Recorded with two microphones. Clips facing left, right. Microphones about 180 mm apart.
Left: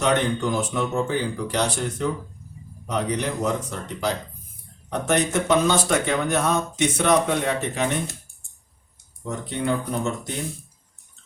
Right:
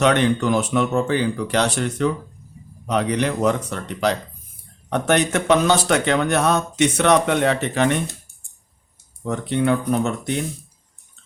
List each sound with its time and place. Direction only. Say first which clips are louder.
0.0 s speech: right 4 dB; 75° right (ahead or behind)
9.2 s speech: right 6 dB; 65° right (ahead or behind)